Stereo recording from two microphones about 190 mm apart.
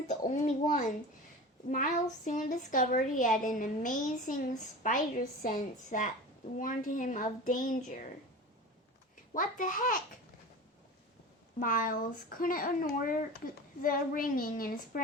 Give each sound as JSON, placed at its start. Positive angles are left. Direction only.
{"t": 0.1, "sound": "speech", "side_deg": 40}
{"t": 2.2, "sound": "a woman's voice", "side_deg": 40}
{"t": 9.3, "sound": "a woman's voice", "side_deg": 45}
{"t": 11.6, "sound": "a woman's voice", "side_deg": 45}